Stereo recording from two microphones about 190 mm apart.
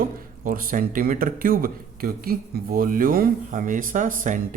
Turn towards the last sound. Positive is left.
turn(degrees=-45)  # may be behind; listen again after turning